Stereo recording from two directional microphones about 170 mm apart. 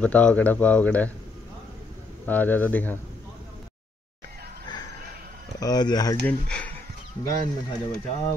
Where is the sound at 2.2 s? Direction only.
10° left (ahead or behind).